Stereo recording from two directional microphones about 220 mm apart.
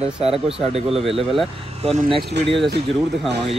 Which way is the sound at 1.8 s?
30° right (ahead or behind).